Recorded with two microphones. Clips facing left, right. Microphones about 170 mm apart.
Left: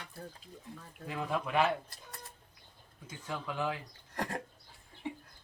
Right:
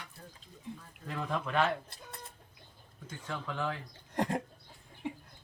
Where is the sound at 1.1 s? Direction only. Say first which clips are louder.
Even; 10° left (ahead or behind).